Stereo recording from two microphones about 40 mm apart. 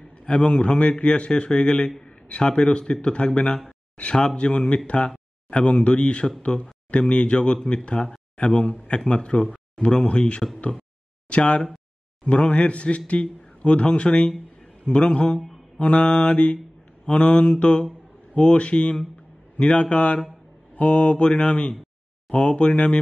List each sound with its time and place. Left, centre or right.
0.3 s a man's voice: left
15.8 s mantra: left
17.0 s a man's voice: left